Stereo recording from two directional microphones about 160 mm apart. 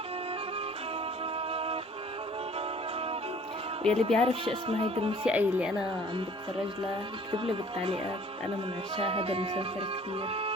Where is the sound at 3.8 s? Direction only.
40° right (ahead or behind).